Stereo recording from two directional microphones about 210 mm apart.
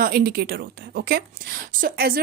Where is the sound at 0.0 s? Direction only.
45° right (ahead or behind).